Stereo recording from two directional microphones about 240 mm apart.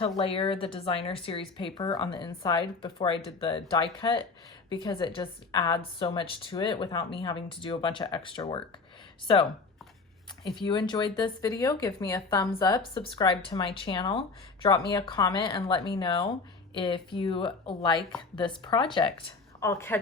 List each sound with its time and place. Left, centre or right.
0.2 s a woman's voice: left